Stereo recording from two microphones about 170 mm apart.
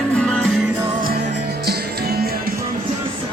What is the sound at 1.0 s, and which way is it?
Music, 70° right (ahead or behind).